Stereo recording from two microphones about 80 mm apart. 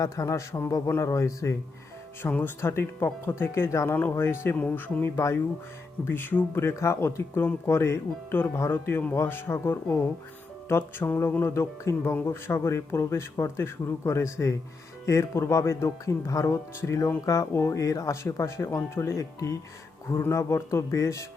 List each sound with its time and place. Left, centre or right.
0.0 s speech: left
2.3 s speech: left